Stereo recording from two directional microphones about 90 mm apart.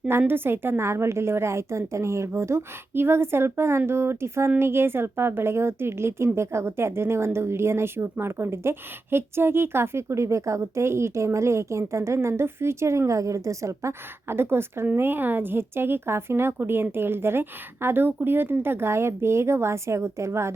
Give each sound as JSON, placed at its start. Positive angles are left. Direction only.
{"t": 0.1, "sound": "a woman's voice", "side_deg": -25}